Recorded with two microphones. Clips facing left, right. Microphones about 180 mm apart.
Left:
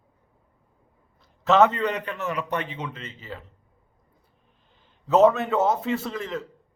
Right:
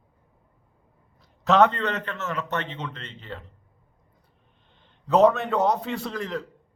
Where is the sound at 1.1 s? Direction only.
Centre (ahead or behind).